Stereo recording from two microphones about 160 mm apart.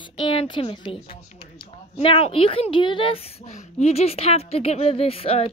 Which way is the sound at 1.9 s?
40° left (ahead or behind).